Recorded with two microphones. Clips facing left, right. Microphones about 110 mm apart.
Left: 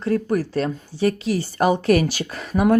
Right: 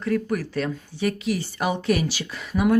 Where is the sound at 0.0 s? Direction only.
30° left (ahead or behind).